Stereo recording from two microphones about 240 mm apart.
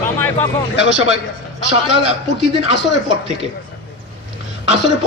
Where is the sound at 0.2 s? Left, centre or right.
Centre.